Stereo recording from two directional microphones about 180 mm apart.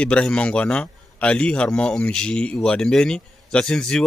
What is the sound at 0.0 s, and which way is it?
A man's voice, 5° left (ahead or behind).